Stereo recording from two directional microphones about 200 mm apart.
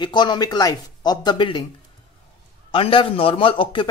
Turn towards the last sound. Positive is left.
turn(degrees=25)  # may be behind; listen again after turning